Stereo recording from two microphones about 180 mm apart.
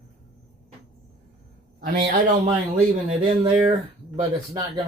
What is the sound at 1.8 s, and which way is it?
Speech, 45° right (ahead or behind).